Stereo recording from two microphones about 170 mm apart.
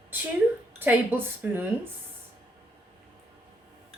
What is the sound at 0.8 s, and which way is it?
Speech, 10° right (ahead or behind).